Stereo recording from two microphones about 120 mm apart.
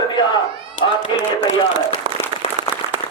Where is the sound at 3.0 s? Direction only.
55° left (ahead or behind).